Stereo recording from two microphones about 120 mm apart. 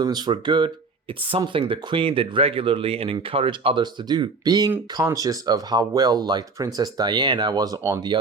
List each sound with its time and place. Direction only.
0.0 s speech: 35° right (ahead or behind)
4.1 s speech: 35° right (ahead or behind)